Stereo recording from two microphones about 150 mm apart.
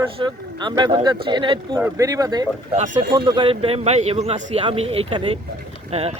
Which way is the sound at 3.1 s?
35° right (ahead or behind).